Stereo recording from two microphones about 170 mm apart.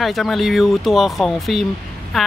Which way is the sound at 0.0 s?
Centre (ahead or behind).